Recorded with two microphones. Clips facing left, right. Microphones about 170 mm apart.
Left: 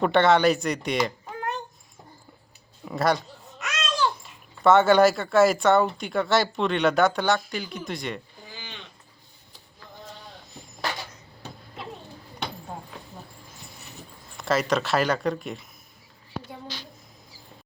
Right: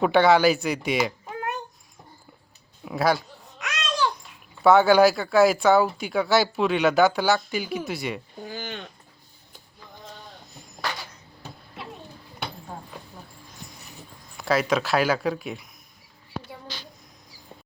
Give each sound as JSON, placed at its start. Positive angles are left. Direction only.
{"t": 0.0, "sound": "speech", "side_deg": 0}
{"t": 2.8, "sound": "a child's voice", "side_deg": 0}
{"t": 8.4, "sound": "a sound", "side_deg": -50}
{"t": 14.3, "sound": "speech", "side_deg": 0}